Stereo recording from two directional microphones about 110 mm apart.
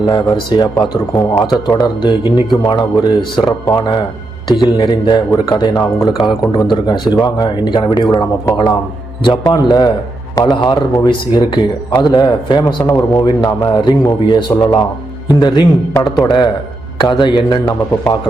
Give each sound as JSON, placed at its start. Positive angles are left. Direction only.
{"t": 0.0, "sound": "speech", "side_deg": 45}
{"t": 12.8, "sound": "speech", "side_deg": 30}